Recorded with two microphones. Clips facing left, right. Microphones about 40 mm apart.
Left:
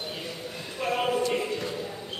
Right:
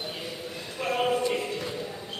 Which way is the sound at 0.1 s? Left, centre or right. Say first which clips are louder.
Even; centre.